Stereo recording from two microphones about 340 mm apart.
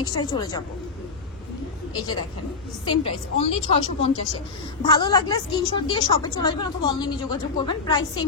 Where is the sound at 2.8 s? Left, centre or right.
Centre.